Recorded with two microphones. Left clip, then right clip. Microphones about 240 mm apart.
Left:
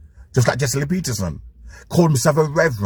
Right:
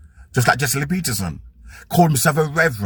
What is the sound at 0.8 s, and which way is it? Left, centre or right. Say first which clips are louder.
Speech: even; centre.